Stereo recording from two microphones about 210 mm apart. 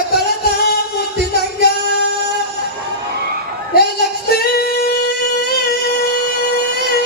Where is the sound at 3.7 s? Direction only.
50° left (ahead or behind).